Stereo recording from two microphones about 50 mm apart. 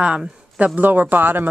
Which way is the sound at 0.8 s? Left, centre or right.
Right.